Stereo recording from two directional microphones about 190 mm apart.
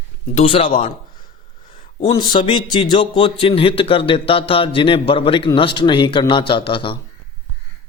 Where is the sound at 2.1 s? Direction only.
25° left (ahead or behind).